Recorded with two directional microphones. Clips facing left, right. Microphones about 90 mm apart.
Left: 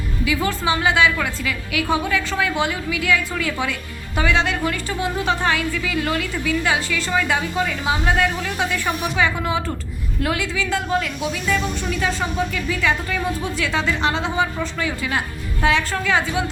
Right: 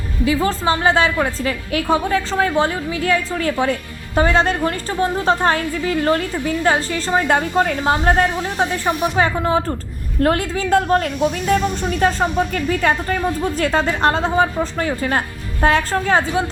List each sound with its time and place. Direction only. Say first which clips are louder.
0.4 s a woman's voice: right 2 dB; 40° right (ahead or behind)